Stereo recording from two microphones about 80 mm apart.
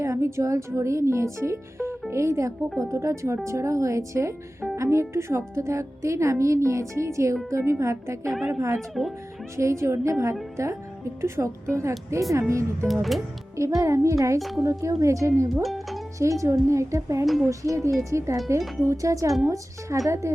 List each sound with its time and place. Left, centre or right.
0.0 s speech: right
9.0 s speech: centre
9.6 s speech: right
12.9 s speech: centre
13.6 s speech: right
14.3 s speech: centre
14.6 s speech: right
15.6 s speech: centre
16.1 s speech: right